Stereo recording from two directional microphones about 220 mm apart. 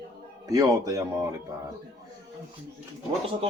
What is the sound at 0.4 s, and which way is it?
Speech, 15° right (ahead or behind).